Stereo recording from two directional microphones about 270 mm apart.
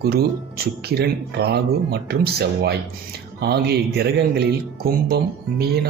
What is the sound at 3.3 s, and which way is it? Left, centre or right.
Speech, right.